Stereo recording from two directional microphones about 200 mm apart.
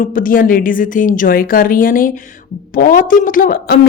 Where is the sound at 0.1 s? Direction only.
45° left (ahead or behind).